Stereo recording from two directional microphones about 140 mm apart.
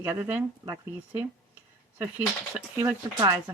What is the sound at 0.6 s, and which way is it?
Speech, 25° right (ahead or behind).